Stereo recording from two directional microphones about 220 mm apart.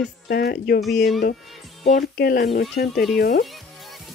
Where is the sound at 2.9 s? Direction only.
Centre (ahead or behind).